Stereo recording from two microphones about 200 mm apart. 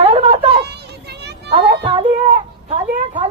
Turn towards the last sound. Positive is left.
turn(degrees=-30)  # may be behind; listen again after turning